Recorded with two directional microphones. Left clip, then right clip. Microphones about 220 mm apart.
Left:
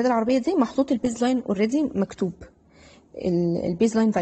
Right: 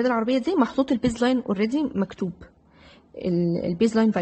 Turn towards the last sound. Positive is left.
turn(degrees=0)  # may be behind; listen again after turning